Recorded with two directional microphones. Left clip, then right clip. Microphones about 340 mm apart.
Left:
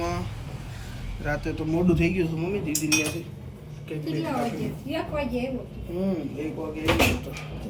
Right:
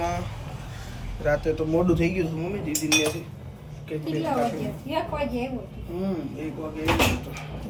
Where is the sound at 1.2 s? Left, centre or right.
Centre.